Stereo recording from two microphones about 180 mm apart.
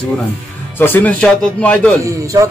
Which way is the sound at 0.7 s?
10° left (ahead or behind).